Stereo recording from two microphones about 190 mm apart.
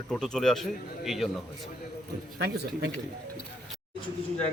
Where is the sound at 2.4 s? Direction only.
60° right (ahead or behind).